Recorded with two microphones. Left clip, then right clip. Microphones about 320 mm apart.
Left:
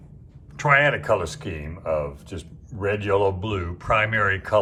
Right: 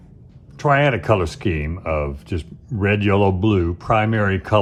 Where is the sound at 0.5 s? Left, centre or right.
Centre.